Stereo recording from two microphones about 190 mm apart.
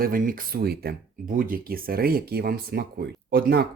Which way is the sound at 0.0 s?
50° right (ahead or behind).